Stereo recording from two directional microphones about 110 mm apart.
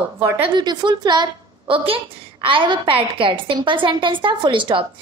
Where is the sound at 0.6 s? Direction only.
40° right (ahead or behind).